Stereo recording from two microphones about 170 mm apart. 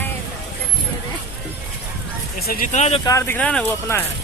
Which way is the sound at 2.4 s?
60° left (ahead or behind).